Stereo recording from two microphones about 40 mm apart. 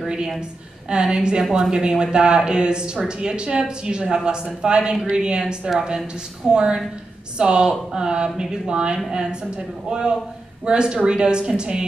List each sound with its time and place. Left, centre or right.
0.8 s speech: centre